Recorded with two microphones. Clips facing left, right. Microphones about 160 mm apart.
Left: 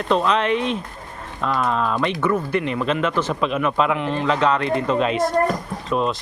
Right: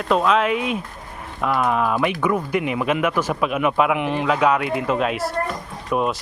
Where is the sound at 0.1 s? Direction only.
5° right (ahead or behind).